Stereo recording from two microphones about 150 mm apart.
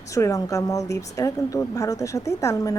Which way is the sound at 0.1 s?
20° left (ahead or behind).